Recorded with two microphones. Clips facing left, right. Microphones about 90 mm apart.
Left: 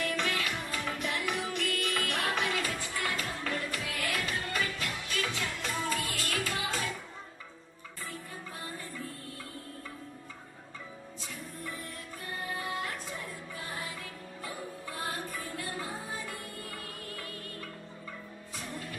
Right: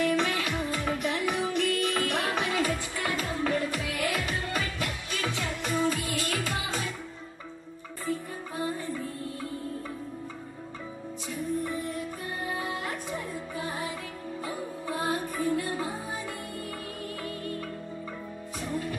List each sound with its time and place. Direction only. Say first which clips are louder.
0.0 s music: right 6 dB; 20° right (ahead or behind)
11.6 s music: right 9 dB; 20° right (ahead or behind)